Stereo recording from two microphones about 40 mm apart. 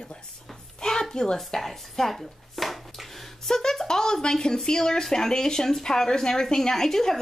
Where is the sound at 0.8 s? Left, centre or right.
Centre.